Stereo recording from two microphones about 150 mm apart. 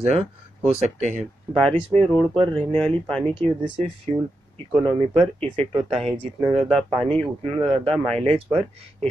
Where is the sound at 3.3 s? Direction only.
35° right (ahead or behind).